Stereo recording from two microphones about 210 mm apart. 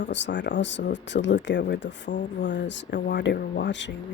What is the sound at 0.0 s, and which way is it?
Speech, 55° left (ahead or behind).